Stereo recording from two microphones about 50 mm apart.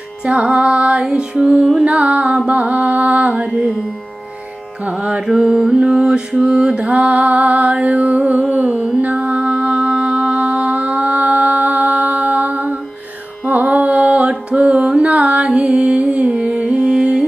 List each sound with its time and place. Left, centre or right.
0.2 s music: centre
1.4 s music: centre; by 3.7 s right
5.2 s music: centre
6.4 s mantra: centre
6.7 s music: right
14.5 s music: centre
15.0 s carnatic music: right
15.4 s music: centre
16.2 s music: right
16.8 s music: centre